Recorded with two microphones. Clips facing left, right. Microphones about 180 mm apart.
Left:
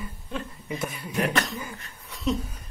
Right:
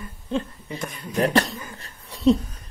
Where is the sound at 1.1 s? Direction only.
35° right (ahead or behind).